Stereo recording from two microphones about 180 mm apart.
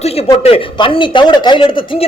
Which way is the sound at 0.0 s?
35° left (ahead or behind).